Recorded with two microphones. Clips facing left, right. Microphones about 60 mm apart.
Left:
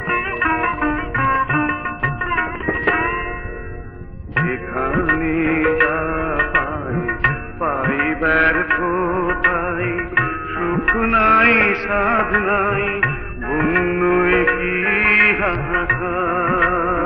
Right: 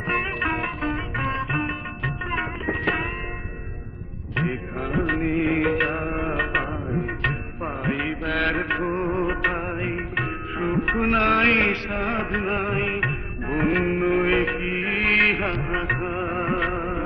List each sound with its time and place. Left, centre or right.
0.7 s music: left
2.3 s tabla: left
4.4 s music: left
5.2 s music of bollywood: left
5.5 s music: left
7.0 s music: left
8.2 s mantra: left
9.4 s music: left
9.6 s music: left